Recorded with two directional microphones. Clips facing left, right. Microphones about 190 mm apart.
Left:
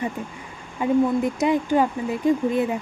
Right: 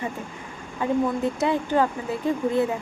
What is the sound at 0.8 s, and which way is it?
Speech, 15° left (ahead or behind).